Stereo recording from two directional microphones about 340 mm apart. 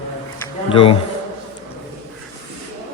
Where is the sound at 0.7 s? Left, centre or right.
Centre.